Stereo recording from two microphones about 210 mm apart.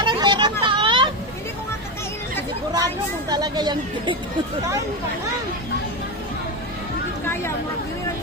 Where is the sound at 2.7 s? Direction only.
20° right (ahead or behind).